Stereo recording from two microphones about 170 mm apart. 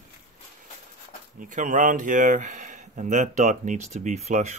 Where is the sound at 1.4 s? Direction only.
50° right (ahead or behind).